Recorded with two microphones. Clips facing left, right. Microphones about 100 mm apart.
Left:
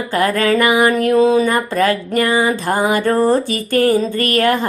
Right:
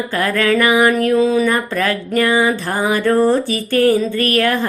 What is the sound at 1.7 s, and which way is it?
Music, 35° left (ahead or behind).